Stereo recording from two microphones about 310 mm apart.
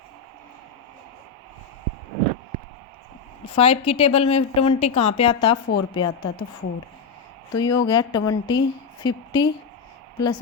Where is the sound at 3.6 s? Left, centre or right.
Centre.